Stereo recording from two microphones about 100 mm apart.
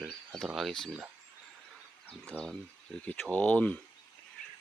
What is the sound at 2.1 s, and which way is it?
Speech, 15° left (ahead or behind).